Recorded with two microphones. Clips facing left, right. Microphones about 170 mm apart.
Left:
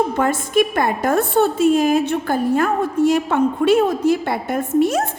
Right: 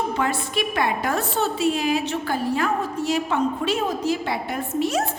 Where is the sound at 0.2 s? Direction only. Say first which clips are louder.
Left 7 dB; 50° left (ahead or behind).